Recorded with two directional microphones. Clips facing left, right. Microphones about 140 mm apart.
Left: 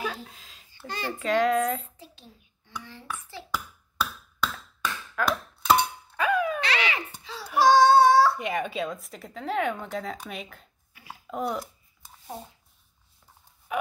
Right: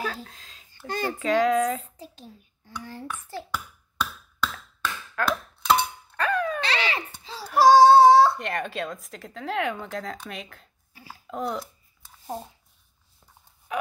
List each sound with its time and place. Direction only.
0.0 s a sound: 5° left (ahead or behind)
0.8 s a child's voice: 50° right (ahead or behind)
1.2 s speech: centre (ahead or behind)
2.0 s a child's voice: 40° right (ahead or behind)
3.5 s a sound: 10° left (ahead or behind)
5.2 s speech: 5° left (ahead or behind)
5.7 s chink: 10° left (ahead or behind)
6.6 s a sound: 30° right (ahead or behind)
7.5 s baby cry: 35° right (ahead or behind)
8.4 s speech: 5° left (ahead or behind)
13.7 s dog: 5° left (ahead or behind)